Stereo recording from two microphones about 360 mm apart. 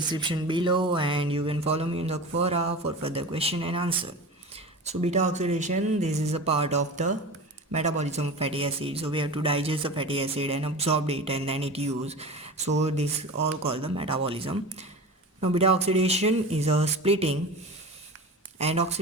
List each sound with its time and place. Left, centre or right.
0.1 s speech: centre
18.6 s speech: centre